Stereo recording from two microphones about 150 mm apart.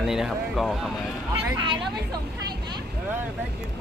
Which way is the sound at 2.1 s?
30° right (ahead or behind).